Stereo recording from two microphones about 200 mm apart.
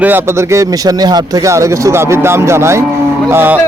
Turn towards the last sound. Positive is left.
turn(degrees=-10)  # may be behind; listen again after turning